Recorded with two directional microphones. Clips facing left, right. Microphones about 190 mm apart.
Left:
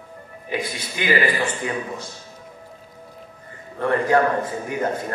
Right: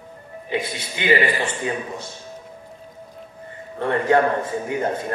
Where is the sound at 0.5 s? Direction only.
25° right (ahead or behind).